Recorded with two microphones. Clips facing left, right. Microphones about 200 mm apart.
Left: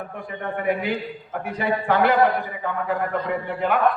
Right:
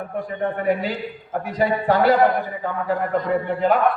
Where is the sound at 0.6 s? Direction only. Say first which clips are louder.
Left 1 dB; 40° right (ahead or behind).